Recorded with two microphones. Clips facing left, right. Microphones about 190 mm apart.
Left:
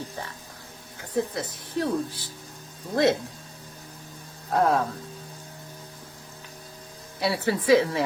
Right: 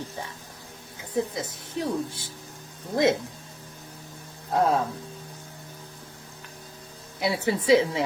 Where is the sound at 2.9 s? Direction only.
15° right (ahead or behind).